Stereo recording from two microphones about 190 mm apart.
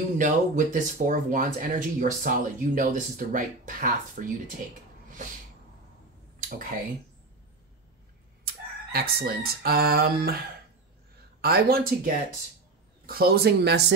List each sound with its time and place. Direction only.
0.2 s speech: 40° right (ahead or behind)
8.5 s crowing: 50° right (ahead or behind)
11.4 s speech: 55° right (ahead or behind)